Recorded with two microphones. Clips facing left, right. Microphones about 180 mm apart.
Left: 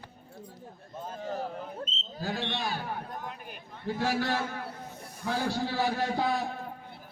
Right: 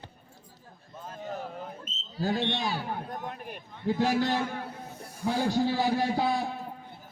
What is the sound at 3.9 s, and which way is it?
Speech, 20° right (ahead or behind).